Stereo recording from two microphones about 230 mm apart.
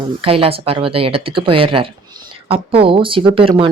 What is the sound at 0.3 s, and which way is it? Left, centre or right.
Speech, right.